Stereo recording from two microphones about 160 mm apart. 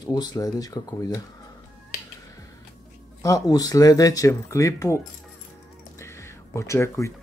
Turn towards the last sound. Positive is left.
turn(degrees=15)  # may be behind; listen again after turning